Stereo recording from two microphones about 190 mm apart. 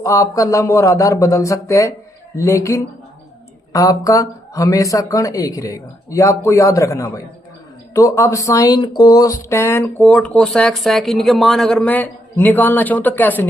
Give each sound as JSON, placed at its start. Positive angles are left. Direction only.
{"t": 0.0, "sound": "speech", "side_deg": 15}